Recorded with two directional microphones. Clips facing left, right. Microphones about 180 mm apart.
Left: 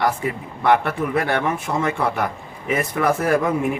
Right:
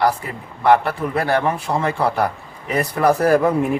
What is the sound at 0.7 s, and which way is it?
A man's voice, 35° right (ahead or behind).